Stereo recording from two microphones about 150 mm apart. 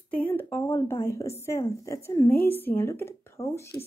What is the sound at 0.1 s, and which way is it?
Speech, 10° left (ahead or behind).